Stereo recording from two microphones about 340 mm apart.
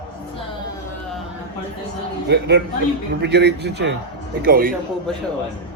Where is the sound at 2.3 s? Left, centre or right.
Right.